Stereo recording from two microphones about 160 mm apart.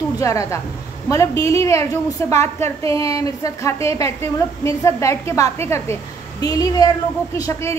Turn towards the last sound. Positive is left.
turn(degrees=20)  # may be behind; listen again after turning